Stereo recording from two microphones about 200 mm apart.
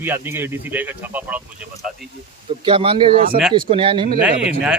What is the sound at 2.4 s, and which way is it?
Speech, 25° right (ahead or behind).